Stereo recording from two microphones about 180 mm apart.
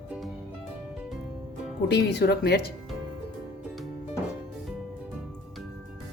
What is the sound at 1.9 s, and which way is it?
Speech, 70° left (ahead or behind).